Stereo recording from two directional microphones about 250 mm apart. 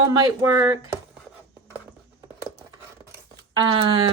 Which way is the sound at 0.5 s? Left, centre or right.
Centre.